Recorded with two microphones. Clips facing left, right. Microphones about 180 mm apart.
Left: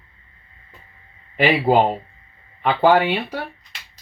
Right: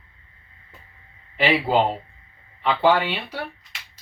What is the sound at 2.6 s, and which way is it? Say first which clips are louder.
Speech: left 3 dB; 45° left (ahead or behind).